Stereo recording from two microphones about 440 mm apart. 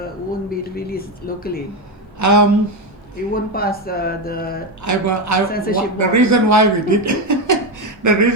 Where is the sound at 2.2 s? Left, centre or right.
Right.